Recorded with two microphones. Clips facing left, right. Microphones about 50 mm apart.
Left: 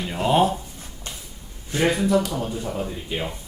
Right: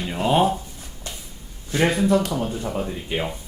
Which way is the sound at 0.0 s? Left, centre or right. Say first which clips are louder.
Even; centre.